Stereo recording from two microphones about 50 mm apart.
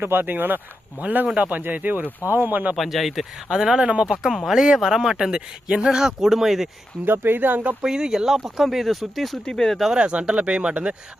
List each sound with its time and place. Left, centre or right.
0.0 s speech: right
2.7 s speech: centre
3.5 s speech: centre
7.3 s speech: right
7.8 s speech: centre
9.9 s speech: right